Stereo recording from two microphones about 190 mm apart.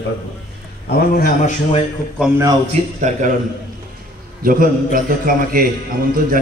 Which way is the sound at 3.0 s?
40° right (ahead or behind).